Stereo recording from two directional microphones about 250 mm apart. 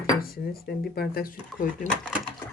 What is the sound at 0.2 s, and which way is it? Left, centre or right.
Speech, left.